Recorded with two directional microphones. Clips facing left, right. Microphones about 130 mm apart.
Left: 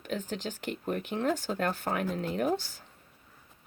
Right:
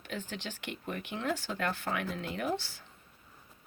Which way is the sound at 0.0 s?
45° left (ahead or behind).